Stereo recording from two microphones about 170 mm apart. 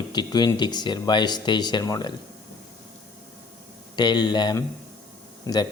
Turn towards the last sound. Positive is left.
turn(degrees=20)  # may be behind; listen again after turning